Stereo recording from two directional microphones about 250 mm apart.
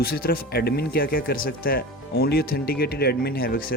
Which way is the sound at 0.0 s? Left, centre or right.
Left.